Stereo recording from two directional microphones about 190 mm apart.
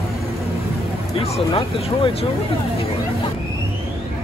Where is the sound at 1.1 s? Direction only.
30° left (ahead or behind).